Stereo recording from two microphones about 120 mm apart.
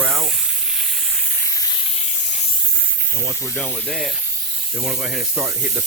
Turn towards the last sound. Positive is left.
turn(degrees=-10)  # may be behind; listen again after turning